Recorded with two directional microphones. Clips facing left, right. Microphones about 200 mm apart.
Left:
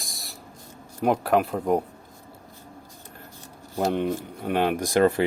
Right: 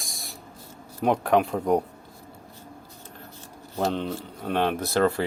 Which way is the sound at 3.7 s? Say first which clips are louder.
Left 3 dB; 15° left (ahead or behind).